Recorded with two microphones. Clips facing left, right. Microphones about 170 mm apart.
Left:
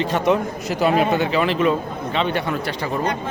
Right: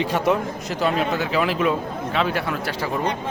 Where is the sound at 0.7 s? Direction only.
5° left (ahead or behind).